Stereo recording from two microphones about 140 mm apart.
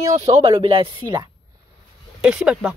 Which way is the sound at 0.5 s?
40° right (ahead or behind).